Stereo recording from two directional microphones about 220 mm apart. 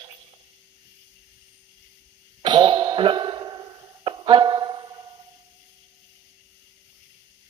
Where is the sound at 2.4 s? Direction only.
20° right (ahead or behind).